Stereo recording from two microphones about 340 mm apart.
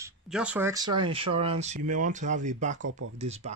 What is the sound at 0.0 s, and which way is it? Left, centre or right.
Speech, centre.